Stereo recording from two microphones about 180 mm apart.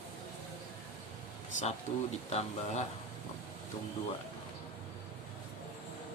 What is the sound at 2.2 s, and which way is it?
Speech, 40° left (ahead or behind).